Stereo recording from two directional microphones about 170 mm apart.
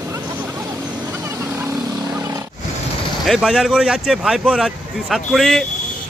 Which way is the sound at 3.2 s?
Centre (ahead or behind).